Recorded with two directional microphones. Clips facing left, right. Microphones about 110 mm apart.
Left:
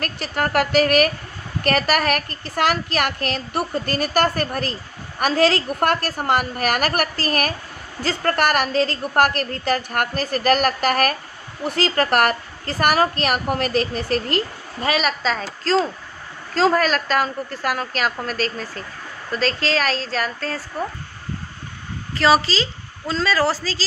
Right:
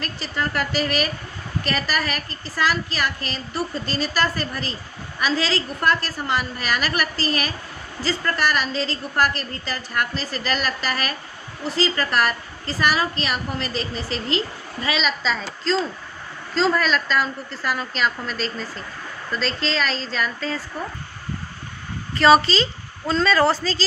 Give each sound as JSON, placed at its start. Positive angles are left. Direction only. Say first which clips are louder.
{"t": 0.0, "sound": "a woman's voice", "louder": "left 3 dB", "side_deg": 60}
{"t": 22.1, "sound": "a woman's voice", "louder": "right 2 dB", "side_deg": 0}